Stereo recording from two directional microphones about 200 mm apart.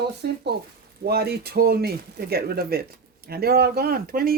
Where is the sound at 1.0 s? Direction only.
50° right (ahead or behind).